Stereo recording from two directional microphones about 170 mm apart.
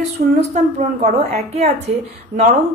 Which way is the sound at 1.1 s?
40° right (ahead or behind).